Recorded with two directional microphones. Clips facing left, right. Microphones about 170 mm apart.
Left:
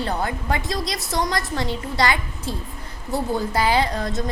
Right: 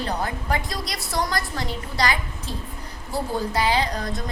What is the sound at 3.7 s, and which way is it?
Speech, 25° left (ahead or behind).